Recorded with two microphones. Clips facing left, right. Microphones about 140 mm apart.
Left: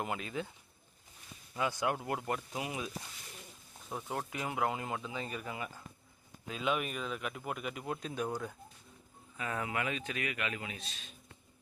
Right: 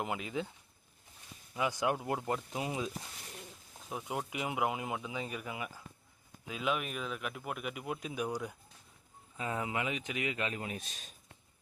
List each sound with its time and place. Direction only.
0.0 s speech: 15° right (ahead or behind)
1.5 s speech: 15° right (ahead or behind)
3.8 s speech: 10° right (ahead or behind)
10.4 s a man's voice: 40° right (ahead or behind)